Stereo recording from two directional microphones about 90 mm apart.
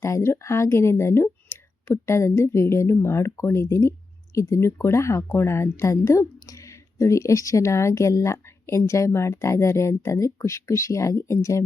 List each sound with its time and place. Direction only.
0.0 s speech: 30° left (ahead or behind)